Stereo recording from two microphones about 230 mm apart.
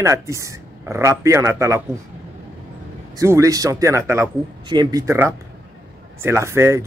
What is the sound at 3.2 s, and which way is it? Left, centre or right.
A man's voice, centre.